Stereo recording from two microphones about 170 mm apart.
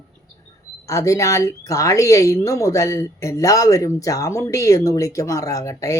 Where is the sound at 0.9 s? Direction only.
20° left (ahead or behind).